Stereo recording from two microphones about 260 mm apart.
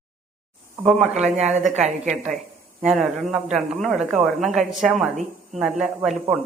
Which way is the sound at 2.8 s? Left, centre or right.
Centre.